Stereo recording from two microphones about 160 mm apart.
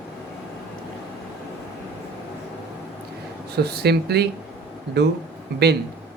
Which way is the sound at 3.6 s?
90° right.